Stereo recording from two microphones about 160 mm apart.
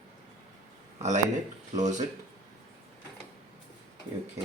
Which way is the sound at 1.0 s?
50° right (ahead or behind).